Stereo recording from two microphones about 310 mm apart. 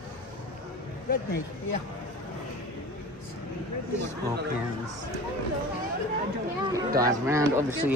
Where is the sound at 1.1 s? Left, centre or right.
Left.